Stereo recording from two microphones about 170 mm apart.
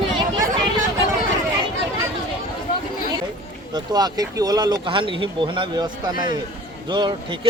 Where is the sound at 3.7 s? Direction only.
25° right (ahead or behind).